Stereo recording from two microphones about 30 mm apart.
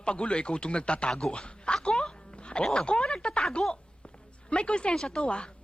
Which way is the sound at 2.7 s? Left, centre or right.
Left.